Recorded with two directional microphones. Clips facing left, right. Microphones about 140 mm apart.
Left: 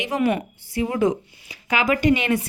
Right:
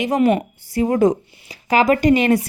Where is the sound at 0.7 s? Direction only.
40° right (ahead or behind).